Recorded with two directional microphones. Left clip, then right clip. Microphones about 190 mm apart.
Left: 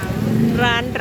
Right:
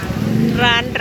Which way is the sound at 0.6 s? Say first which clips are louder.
Right 5 dB; 30° left (ahead or behind).